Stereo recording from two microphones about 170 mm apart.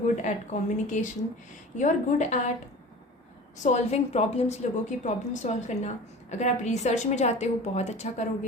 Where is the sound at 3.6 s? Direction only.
40° left (ahead or behind).